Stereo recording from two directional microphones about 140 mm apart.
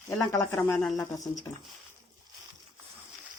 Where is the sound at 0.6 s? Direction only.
10° left (ahead or behind).